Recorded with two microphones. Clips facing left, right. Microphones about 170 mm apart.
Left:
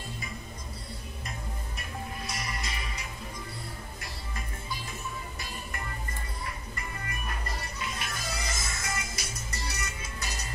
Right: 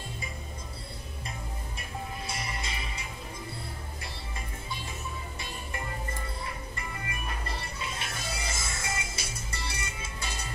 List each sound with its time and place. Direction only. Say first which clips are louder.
1.8 s music: right 1 dB; 30° right (ahead or behind)
7.4 s music: even; 25° right (ahead or behind)